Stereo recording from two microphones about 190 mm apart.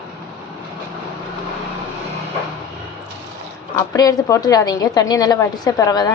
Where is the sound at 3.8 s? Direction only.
20° left (ahead or behind).